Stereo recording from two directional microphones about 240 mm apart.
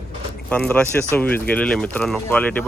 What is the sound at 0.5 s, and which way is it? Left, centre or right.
Speech, centre.